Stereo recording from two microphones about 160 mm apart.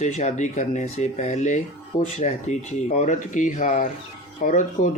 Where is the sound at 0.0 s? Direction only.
45° left (ahead or behind).